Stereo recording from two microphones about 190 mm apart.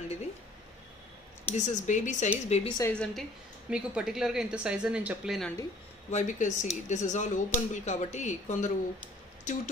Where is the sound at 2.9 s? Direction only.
5° left (ahead or behind).